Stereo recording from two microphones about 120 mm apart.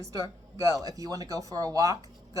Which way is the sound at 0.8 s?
30° right (ahead or behind).